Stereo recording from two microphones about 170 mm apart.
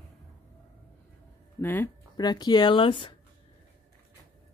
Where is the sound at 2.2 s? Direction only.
25° left (ahead or behind).